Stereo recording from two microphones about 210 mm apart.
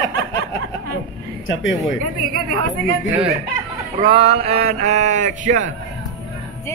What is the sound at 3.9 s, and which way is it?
Speech, 25° right (ahead or behind).